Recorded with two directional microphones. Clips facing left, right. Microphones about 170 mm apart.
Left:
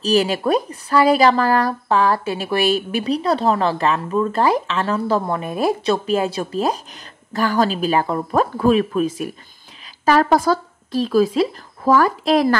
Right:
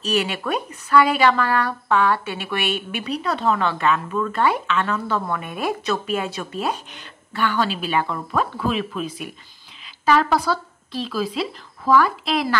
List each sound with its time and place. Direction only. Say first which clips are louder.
0.0 s speech: left 6 dB; 35° left (ahead or behind)